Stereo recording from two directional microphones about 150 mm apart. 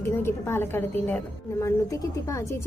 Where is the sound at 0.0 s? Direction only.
15° left (ahead or behind).